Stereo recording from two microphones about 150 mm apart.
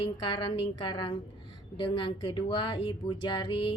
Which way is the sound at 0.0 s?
30° left (ahead or behind).